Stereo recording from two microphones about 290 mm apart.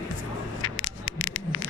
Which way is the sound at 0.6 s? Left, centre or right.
Left.